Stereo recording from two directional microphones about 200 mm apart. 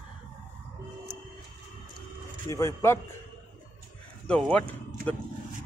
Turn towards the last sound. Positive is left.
turn(degrees=5)  # may be behind; listen again after turning